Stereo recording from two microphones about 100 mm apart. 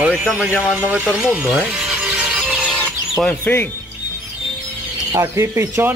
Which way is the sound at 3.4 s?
20° left (ahead or behind).